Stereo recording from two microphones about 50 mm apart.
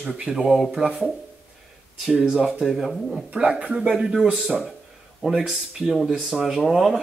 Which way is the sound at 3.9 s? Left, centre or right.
Centre.